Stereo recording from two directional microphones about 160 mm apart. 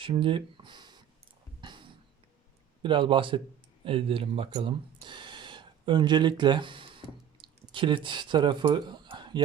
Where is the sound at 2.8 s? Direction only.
30° right (ahead or behind).